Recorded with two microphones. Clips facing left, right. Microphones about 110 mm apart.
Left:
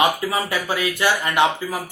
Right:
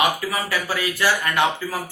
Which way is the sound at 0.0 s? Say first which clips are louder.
Left 2 dB; 25° left (ahead or behind).